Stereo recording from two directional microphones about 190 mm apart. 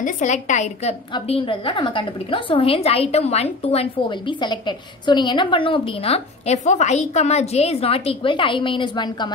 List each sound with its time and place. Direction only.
0.0 s a woman's voice: 40° left (ahead or behind); by 9.3 s 25° left (ahead or behind)